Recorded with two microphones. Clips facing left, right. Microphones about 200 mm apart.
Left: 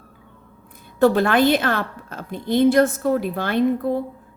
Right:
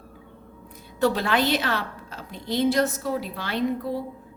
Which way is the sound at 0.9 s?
50° left (ahead or behind).